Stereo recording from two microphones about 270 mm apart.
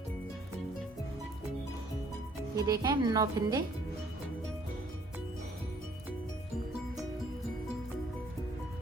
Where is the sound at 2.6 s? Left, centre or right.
Centre.